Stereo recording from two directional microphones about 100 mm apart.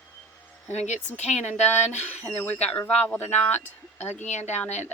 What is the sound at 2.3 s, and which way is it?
Speech, 15° left (ahead or behind).